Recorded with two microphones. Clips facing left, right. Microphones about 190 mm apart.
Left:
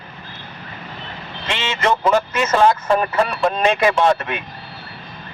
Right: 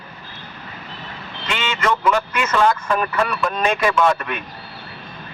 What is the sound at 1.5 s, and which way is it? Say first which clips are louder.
A man's voice: left 1 dB; 30° left (ahead or behind).